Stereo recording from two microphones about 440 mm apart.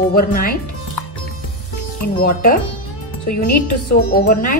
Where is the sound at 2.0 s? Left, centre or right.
Centre.